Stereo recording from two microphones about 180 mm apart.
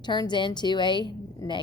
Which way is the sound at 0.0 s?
25° left (ahead or behind).